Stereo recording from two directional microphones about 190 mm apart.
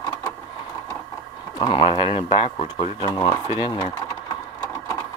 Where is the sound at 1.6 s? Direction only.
25° left (ahead or behind).